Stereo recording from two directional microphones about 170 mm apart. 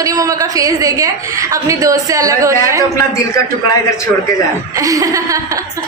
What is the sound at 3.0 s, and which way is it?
Speech, 20° left (ahead or behind).